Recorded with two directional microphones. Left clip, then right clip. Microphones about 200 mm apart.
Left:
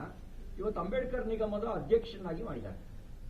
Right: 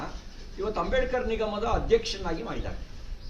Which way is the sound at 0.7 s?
5° right (ahead or behind).